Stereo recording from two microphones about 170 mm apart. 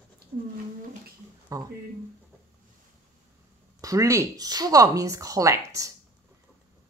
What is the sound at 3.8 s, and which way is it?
Speech, 20° right (ahead or behind).